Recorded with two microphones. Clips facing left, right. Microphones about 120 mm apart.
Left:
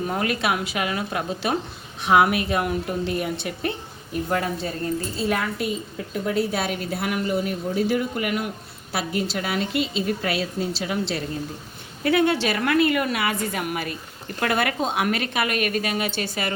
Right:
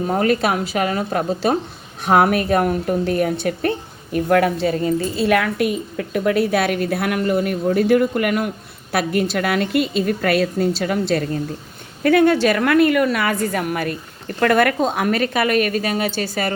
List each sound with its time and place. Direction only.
0.1 s a woman's voice: 40° right (ahead or behind)
4.1 s a woman's voice: 80° right; by 16.5 s 40° right (ahead or behind)